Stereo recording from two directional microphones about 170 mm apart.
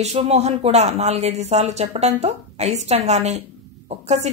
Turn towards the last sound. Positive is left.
turn(degrees=-40)  # may be behind; listen again after turning